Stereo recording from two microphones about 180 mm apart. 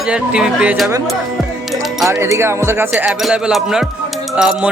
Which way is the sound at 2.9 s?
Centre (ahead or behind).